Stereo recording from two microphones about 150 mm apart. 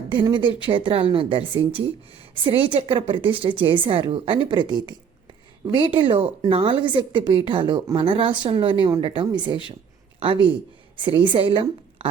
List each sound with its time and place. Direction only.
0.1 s a woman's voice: 30° right (ahead or behind)
10.9 s a woman's voice: 35° right (ahead or behind)